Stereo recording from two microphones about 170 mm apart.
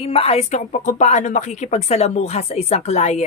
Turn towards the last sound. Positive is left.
turn(degrees=40)  # may be behind; listen again after turning